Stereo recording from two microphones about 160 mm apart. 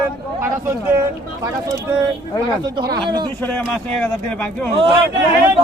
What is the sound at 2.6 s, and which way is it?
Speech, 25° right (ahead or behind).